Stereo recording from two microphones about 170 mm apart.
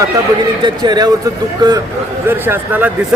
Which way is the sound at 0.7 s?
25° right (ahead or behind).